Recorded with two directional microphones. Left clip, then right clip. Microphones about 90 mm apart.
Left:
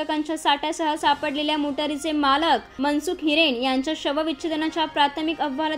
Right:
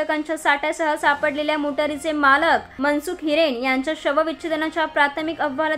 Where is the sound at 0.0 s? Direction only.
35° left (ahead or behind).